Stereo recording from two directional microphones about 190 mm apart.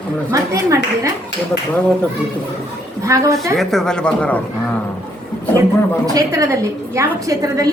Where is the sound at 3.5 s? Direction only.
Centre (ahead or behind).